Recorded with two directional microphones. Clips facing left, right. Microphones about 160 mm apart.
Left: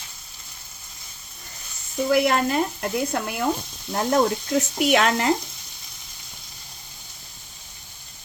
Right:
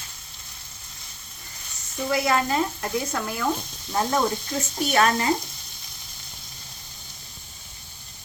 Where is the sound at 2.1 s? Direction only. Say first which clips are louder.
Left 2 dB; 60° left (ahead or behind).